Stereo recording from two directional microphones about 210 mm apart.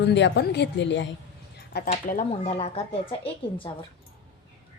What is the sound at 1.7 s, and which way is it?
Speech, 45° left (ahead or behind).